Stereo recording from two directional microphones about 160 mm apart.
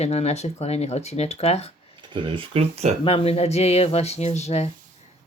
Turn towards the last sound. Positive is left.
turn(degrees=40)  # may be behind; listen again after turning